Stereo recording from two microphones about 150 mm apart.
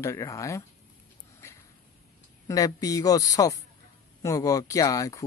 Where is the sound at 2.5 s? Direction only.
25° left (ahead or behind).